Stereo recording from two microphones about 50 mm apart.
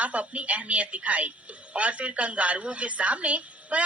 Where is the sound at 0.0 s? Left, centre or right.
Right.